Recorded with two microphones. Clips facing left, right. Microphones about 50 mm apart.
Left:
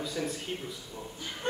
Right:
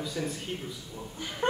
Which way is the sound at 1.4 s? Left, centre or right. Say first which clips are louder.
Right 3 dB; right.